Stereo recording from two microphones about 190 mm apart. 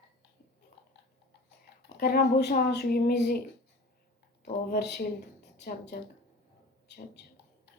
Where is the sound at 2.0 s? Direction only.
55° left (ahead or behind).